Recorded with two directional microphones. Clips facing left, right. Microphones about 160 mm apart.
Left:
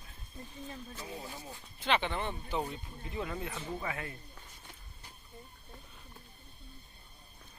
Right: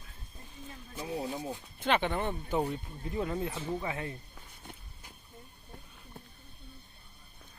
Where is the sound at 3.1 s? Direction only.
30° right (ahead or behind).